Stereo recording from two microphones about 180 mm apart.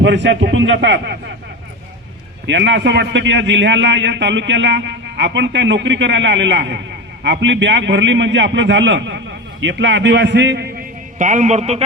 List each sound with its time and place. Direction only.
0.0 s a man's voice: 80° right
2.5 s a man's voice: 75° right (ahead or behind)
11.2 s a man's voice: 45° right (ahead or behind)